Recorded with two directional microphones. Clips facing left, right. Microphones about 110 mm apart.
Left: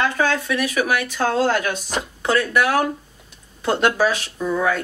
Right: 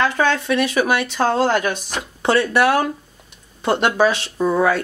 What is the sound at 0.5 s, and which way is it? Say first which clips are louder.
Speech: right 3 dB; 25° right (ahead or behind).